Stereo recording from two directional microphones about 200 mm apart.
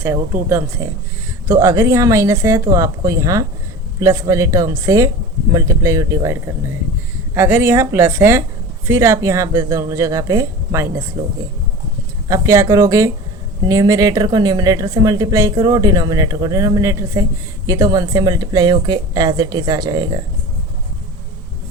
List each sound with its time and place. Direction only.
0.4 s speech: 15° right (ahead or behind)
12.3 s speech: 15° right (ahead or behind)